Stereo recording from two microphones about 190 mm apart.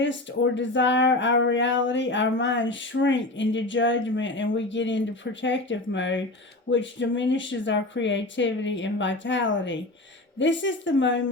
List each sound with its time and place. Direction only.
0.0 s speech: 75° left (ahead or behind)